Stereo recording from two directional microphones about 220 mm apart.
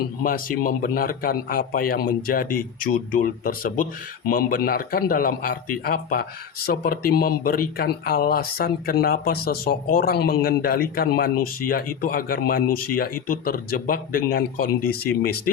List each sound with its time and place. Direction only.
0.0 s a man's voice: 40° left (ahead or behind)